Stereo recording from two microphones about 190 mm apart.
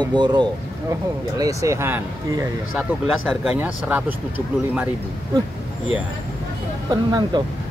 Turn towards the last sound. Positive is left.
turn(degrees=-20)  # may be behind; listen again after turning